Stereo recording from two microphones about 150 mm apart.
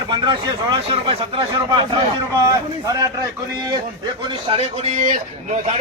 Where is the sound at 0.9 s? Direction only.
40° right (ahead or behind).